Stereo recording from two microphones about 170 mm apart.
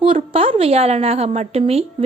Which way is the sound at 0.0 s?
35° right (ahead or behind).